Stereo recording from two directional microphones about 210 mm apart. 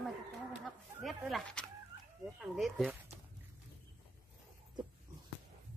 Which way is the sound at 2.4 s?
Centre (ahead or behind).